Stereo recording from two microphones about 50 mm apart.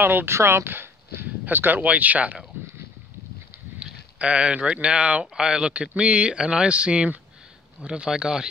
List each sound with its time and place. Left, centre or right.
0.0 s speech: right
0.4 s speech: right
0.7 s speech: right
3.8 s a sound: right
4.8 s speech: right